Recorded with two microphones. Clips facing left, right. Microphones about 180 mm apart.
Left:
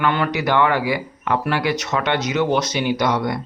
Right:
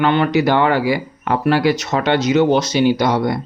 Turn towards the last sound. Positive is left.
turn(degrees=-30)  # may be behind; listen again after turning